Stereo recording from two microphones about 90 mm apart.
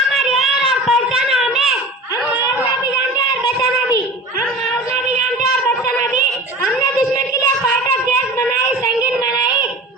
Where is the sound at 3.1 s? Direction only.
45° left (ahead or behind).